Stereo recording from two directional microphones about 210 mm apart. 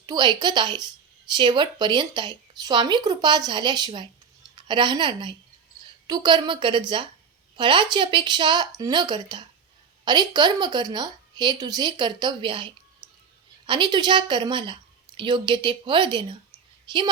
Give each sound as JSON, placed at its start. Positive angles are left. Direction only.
{"t": 0.0, "sound": "a woman's voice", "side_deg": -20}